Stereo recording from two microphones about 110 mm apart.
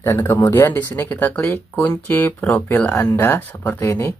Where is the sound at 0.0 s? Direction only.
25° left (ahead or behind).